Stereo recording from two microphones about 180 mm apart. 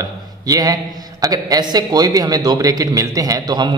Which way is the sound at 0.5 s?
20° right (ahead or behind).